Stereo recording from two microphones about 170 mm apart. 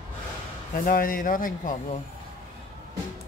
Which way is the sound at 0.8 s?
55° left (ahead or behind).